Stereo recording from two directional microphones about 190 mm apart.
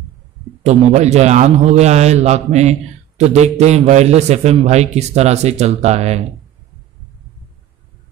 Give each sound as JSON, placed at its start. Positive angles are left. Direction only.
{"t": 0.7, "sound": "a man's voice", "side_deg": -35}